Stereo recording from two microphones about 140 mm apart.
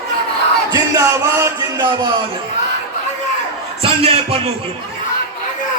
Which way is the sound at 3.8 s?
40° right (ahead or behind).